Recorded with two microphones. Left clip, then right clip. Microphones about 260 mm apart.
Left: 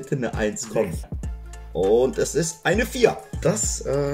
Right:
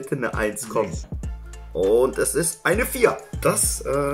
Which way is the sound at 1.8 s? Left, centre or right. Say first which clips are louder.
Even; centre.